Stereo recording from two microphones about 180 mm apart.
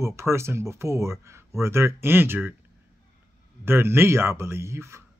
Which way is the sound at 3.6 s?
15° right (ahead or behind).